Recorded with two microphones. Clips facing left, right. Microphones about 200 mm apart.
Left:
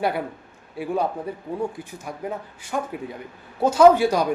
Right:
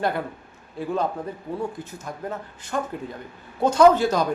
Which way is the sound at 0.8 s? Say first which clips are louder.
Left 1 dB; 10° left (ahead or behind).